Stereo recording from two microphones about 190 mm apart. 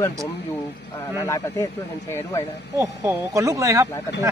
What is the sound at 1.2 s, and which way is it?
Speech, 15° left (ahead or behind).